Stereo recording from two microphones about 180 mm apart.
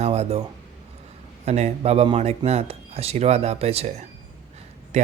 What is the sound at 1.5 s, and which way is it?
Speech, 35° right (ahead or behind).